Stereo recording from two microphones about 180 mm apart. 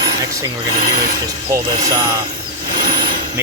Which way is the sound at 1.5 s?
20° right (ahead or behind).